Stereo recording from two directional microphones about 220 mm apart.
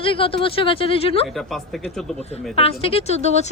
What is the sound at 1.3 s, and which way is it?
Speech, centre (ahead or behind).